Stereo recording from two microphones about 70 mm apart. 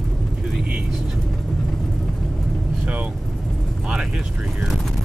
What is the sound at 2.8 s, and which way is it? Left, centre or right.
Speech, centre.